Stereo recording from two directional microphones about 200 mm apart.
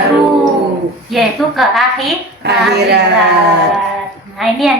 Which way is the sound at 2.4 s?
55° right (ahead or behind).